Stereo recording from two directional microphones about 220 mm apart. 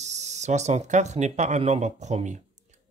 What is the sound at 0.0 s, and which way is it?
Speech, 30° right (ahead or behind).